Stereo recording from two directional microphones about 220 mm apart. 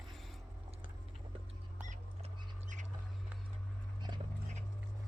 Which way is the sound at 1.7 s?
35° right (ahead or behind).